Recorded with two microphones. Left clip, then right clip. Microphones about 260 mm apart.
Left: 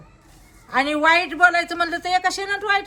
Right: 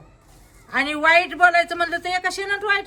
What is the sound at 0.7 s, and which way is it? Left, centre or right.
A man's voice, centre.